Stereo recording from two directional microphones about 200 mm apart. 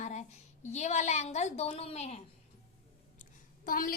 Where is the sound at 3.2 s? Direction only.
45° left (ahead or behind).